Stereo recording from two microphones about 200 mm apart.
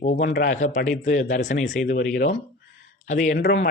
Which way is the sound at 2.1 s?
55° left (ahead or behind).